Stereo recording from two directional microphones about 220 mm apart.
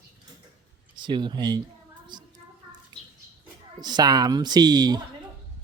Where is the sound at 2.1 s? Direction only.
20° right (ahead or behind).